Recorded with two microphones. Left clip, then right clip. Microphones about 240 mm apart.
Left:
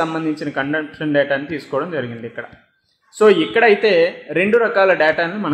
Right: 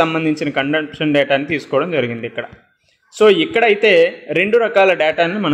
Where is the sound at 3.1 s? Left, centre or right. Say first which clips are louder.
Right 1 dB; right.